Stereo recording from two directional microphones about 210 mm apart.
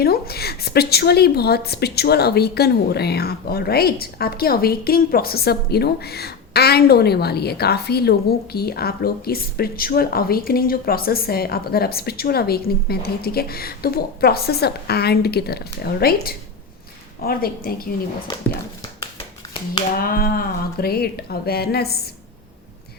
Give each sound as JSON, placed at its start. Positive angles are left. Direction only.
{"t": 0.0, "sound": "a woman's voice", "side_deg": 45}
{"t": 20.0, "sound": "a woman's voice", "side_deg": 45}